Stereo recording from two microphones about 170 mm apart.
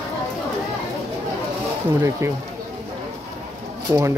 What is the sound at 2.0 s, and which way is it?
Speech, 15° right (ahead or behind).